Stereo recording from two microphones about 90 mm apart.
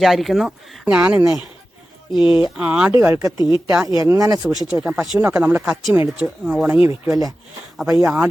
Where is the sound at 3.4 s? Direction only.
50° left (ahead or behind).